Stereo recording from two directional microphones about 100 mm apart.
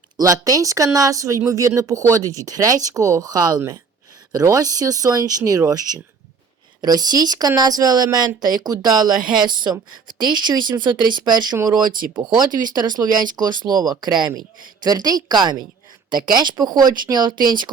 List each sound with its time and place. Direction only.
0.2 s speech: 35° right (ahead or behind)